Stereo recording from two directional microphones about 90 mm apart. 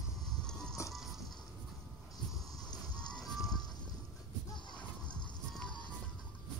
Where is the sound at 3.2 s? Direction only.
Centre (ahead or behind).